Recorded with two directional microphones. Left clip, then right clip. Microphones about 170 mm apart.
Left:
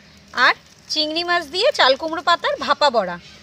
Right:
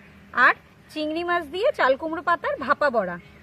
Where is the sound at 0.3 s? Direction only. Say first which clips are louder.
Left 2 dB; 35° left (ahead or behind).